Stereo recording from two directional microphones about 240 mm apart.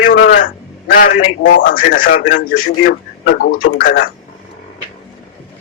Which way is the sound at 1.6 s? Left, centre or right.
Left.